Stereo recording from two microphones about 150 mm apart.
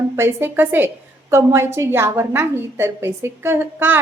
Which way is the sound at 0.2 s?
15° right (ahead or behind).